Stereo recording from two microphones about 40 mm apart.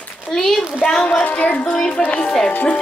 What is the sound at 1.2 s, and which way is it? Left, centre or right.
Music, left.